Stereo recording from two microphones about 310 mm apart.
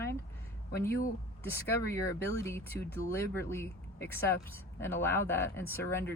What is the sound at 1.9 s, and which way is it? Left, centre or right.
Speech, centre.